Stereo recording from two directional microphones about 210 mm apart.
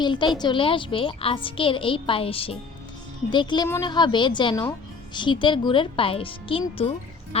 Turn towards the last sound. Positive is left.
turn(degrees=25)  # may be behind; listen again after turning